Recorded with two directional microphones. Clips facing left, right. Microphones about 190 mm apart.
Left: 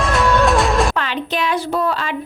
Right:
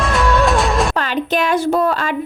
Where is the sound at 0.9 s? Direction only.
45° right (ahead or behind).